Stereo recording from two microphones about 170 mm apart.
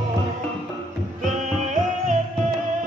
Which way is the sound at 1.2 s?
45° right (ahead or behind).